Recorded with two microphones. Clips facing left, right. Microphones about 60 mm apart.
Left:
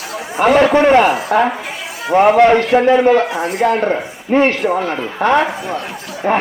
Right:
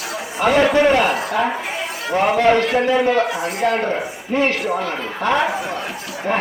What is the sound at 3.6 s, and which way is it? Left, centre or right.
Speech, left.